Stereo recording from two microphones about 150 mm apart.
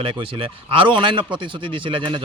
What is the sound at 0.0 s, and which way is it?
A man's voice, 35° right (ahead or behind).